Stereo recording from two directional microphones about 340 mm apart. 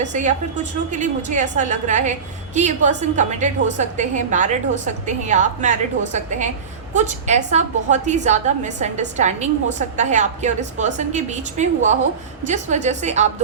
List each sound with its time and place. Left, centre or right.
0.0 s a woman's voice: right